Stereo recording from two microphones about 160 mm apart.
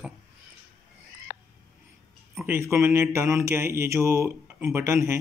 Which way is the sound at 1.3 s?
55° left (ahead or behind).